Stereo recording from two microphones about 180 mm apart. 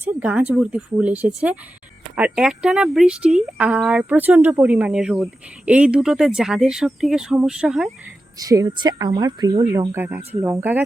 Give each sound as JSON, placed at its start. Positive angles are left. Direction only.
{"t": 0.0, "sound": "speech", "side_deg": -10}
{"t": 8.4, "sound": "speech", "side_deg": -20}